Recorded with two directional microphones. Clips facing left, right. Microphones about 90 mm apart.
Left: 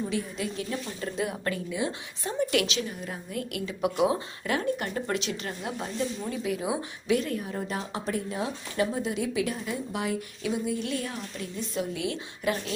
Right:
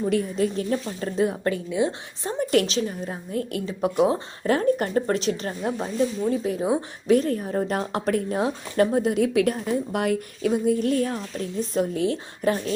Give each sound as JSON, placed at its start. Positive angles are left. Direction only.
{"t": 0.1, "sound": "a woman's voice", "side_deg": -45}
{"t": 2.4, "sound": "a woman's voice", "side_deg": -40}
{"t": 7.7, "sound": "speech", "side_deg": -55}